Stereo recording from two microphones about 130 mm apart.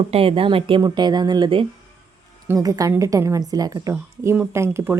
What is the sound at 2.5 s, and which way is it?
Speech, 30° right (ahead or behind).